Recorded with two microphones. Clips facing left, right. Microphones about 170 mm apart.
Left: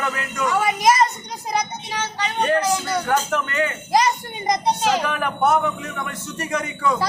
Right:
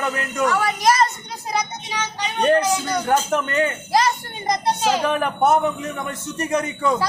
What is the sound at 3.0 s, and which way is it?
Speech, 25° right (ahead or behind).